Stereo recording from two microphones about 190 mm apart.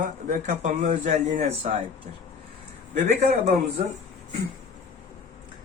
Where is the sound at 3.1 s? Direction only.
35° right (ahead or behind).